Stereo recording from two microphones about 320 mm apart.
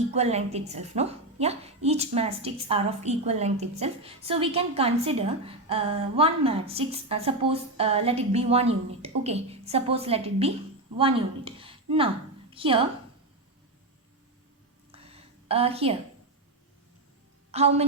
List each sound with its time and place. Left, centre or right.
0.1 s a woman's voice: centre
14.9 s a sound: centre
17.5 s a woman's voice: centre